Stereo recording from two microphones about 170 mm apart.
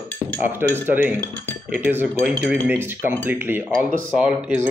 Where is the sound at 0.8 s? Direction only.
10° right (ahead or behind).